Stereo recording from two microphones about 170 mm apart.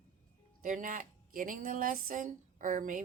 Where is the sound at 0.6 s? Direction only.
50° right (ahead or behind).